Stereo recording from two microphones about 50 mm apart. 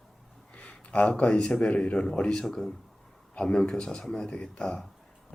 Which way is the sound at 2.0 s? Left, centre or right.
Centre.